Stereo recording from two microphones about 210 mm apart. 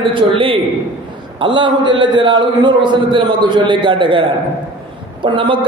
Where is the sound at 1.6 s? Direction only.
20° right (ahead or behind).